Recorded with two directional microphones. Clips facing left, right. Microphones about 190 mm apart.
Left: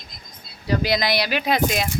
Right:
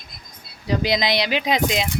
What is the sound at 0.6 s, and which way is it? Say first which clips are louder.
Speech: even; 20° right (ahead or behind).